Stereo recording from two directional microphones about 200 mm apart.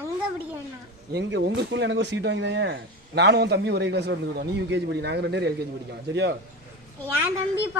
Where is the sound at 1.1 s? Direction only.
55° right (ahead or behind).